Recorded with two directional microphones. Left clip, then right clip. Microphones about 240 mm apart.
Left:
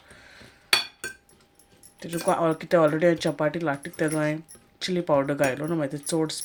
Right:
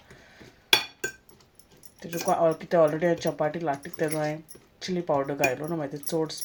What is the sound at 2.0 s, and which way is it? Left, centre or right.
Speech, left.